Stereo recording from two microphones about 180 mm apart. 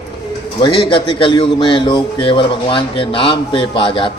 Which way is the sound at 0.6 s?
30° left (ahead or behind).